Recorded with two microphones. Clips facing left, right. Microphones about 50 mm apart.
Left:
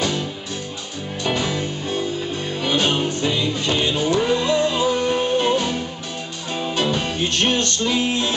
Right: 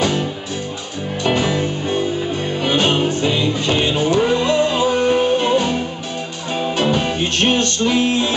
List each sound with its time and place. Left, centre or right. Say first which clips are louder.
0.0 s music: right 4 dB; right
7.3 s music: right 4 dB; right